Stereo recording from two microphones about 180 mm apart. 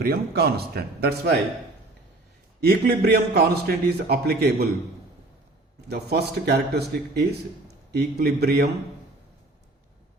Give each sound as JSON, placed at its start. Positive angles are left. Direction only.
{"t": 0.0, "sound": "a man's voice", "side_deg": -60}
{"t": 2.6, "sound": "a man's voice", "side_deg": -60}
{"t": 5.9, "sound": "a man's voice", "side_deg": -60}